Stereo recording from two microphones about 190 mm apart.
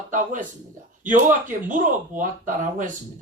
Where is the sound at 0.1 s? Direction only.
40° right (ahead or behind).